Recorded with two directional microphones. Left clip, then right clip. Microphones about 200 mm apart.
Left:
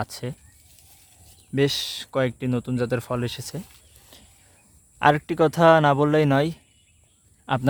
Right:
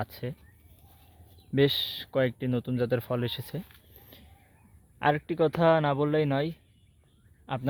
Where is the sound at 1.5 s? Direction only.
5° left (ahead or behind).